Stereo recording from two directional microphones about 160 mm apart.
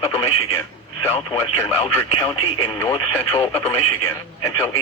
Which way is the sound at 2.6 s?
15° left (ahead or behind).